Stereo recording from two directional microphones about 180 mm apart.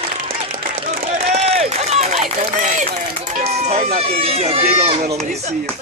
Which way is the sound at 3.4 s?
35° right (ahead or behind).